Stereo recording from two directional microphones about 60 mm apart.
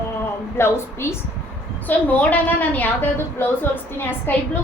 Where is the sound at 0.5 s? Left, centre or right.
Left.